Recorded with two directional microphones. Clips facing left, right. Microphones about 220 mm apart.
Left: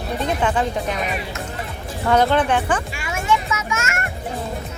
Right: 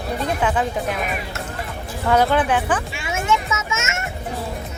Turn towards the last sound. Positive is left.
turn(degrees=-25)  # may be behind; listen again after turning